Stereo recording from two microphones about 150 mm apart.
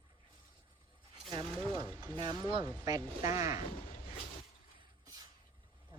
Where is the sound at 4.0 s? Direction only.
35° left (ahead or behind).